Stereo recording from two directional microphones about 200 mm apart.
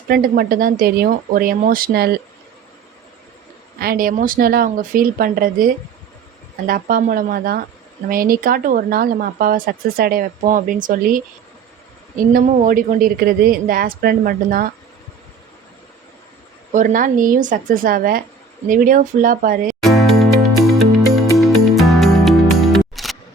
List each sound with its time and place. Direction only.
0.1 s speech: 45° right (ahead or behind)
3.8 s speech: 45° right (ahead or behind)
16.7 s speech: 40° right (ahead or behind)
19.8 s music: centre (ahead or behind)